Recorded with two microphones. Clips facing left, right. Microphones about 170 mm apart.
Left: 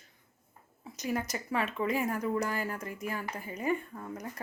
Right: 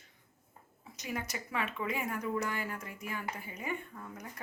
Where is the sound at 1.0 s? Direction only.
40° left (ahead or behind).